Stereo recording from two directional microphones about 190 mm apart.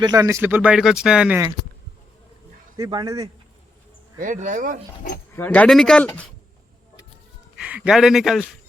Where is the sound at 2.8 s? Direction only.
20° right (ahead or behind).